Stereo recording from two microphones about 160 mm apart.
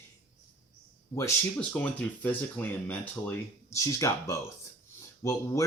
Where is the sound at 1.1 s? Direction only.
10° left (ahead or behind).